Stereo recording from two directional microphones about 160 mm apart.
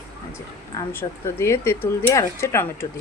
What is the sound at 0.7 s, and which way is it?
Speech, 15° left (ahead or behind).